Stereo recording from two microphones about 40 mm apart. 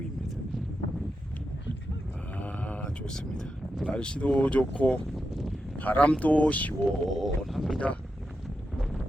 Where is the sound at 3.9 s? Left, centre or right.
Left.